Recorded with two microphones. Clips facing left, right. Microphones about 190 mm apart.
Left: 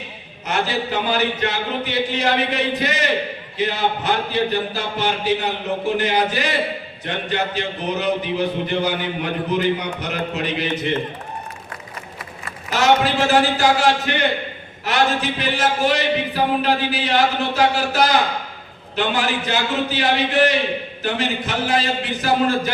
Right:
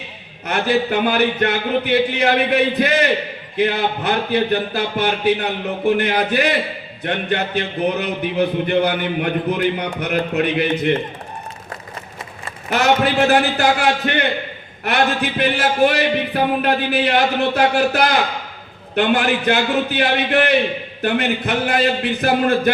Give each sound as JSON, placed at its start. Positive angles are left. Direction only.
{"t": 0.4, "sound": "a man's voice", "side_deg": -60}
{"t": 12.7, "sound": "a man's voice", "side_deg": -55}